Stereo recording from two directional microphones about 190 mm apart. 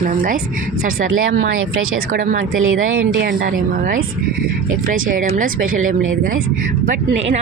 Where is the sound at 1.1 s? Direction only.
85° right.